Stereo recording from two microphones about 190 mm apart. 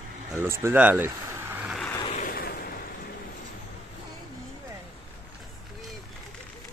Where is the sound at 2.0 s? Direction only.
45° left (ahead or behind).